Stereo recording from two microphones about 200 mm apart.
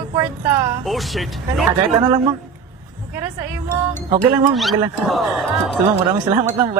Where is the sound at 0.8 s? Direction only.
Centre (ahead or behind).